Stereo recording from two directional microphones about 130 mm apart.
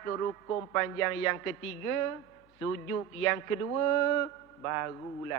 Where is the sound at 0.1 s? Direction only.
20° left (ahead or behind).